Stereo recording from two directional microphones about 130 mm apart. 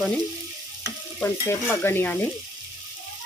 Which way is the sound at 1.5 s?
20° left (ahead or behind).